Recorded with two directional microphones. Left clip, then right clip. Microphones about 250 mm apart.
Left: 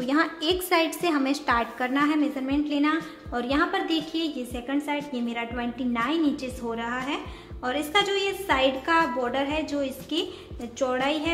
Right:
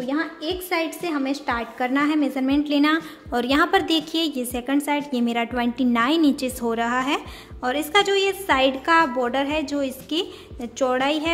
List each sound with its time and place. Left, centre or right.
0.0 s a woman's voice: centre; by 11.3 s right